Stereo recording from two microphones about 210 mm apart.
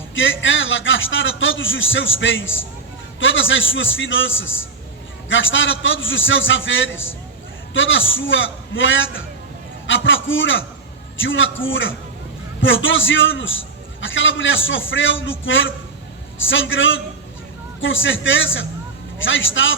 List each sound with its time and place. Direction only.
0.1 s a man's voice: 65° left (ahead or behind)